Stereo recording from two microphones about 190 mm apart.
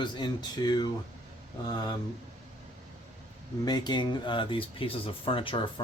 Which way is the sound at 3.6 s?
20° left (ahead or behind).